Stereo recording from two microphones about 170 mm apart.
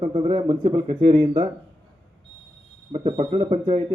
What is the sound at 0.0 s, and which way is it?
A man's voice, 30° right (ahead or behind).